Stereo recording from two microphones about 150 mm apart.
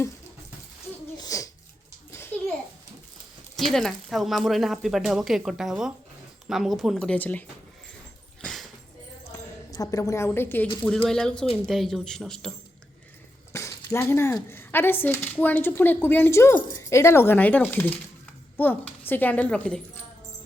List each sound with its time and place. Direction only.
1.2 s a sound: 25° left (ahead or behind)
3.6 s speech: 5° left (ahead or behind)
8.4 s dog: 5° left (ahead or behind)
9.3 s speech: 25° left (ahead or behind); by 12.5 s centre (ahead or behind)
13.5 s speech: 20° left (ahead or behind)